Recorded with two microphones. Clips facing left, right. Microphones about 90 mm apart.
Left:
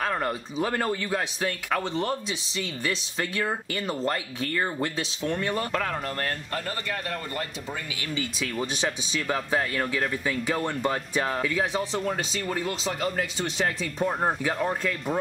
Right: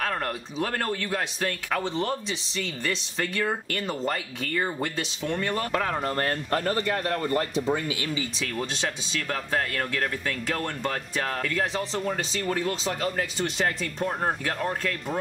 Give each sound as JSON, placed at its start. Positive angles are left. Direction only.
{"t": 0.0, "sound": "speech", "side_deg": 5}
{"t": 6.0, "sound": "speech", "side_deg": -35}
{"t": 8.4, "sound": "speech", "side_deg": 5}